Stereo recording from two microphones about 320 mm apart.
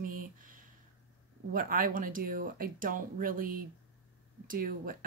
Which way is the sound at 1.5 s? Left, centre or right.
Right.